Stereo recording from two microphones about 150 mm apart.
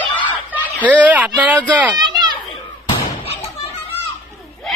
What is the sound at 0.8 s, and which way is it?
Speech, 10° right (ahead or behind).